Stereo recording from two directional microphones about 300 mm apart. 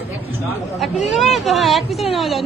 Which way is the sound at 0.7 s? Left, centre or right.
Centre.